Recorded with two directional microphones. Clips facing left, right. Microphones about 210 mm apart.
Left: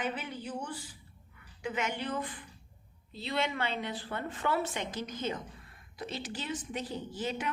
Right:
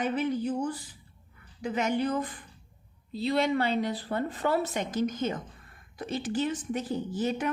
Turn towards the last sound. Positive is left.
turn(degrees=-45)  # may be behind; listen again after turning